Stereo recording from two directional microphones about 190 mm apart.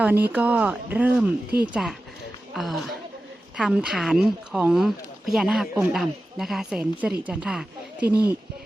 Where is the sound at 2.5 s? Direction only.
Centre (ahead or behind).